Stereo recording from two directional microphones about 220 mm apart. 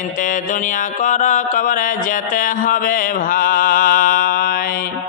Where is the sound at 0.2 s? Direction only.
35° left (ahead or behind).